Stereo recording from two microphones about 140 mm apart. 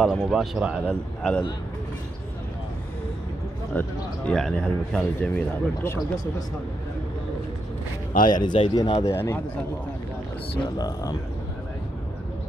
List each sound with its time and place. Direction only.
0.0 s speech: centre (ahead or behind)
0.8 s a man's voice: 10° left (ahead or behind)
3.7 s a man's voice: 10° left (ahead or behind)
8.3 s speech: 30° left (ahead or behind)
9.0 s a man's voice: 20° left (ahead or behind)
10.6 s speech: 30° left (ahead or behind)